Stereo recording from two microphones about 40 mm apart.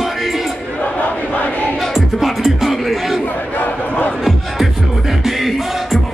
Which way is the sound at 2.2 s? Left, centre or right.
Centre.